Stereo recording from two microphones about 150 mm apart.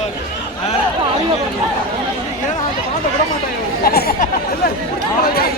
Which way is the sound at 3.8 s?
90° left.